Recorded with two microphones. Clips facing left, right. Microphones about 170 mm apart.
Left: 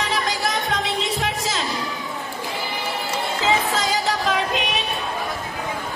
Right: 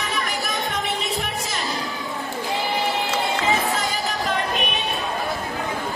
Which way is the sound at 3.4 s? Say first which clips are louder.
Left 1 dB; 90° left.